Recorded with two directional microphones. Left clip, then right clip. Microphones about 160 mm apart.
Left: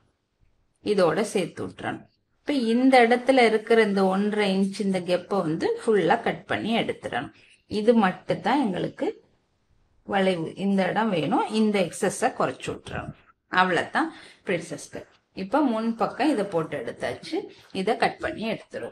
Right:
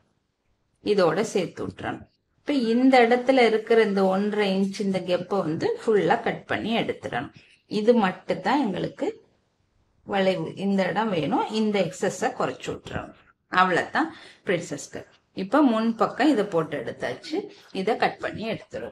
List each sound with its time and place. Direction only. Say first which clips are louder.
0.8 s a woman's voice: right 1 dB; centre (ahead or behind)
14.4 s speech: right 2 dB; 20° right (ahead or behind)
16.7 s a woman's voice: even; centre (ahead or behind)